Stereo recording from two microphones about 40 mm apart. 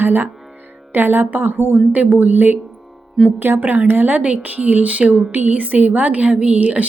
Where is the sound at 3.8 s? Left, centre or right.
Right.